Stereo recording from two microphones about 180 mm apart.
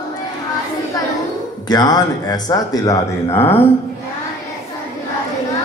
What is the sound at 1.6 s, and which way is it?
A man's voice, 20° left (ahead or behind).